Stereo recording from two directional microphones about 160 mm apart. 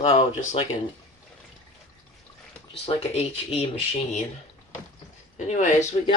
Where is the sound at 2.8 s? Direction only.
40° left (ahead or behind).